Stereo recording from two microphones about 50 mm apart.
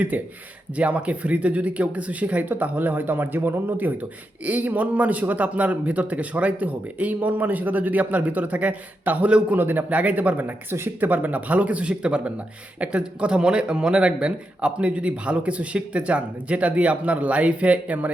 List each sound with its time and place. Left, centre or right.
0.1 s a man's voice: right
9.6 s a man's voice: right
9.9 s a man's voice: right